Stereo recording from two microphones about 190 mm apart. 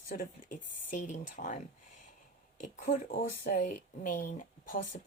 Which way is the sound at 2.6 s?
40° left (ahead or behind).